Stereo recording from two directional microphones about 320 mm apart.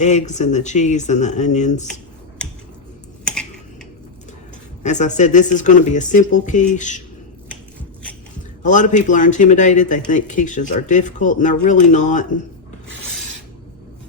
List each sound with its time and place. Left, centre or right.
0.0 s speech: left
4.8 s speech: left
8.6 s speech: left